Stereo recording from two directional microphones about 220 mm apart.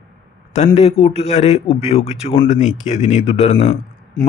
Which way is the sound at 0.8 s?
30° left (ahead or behind).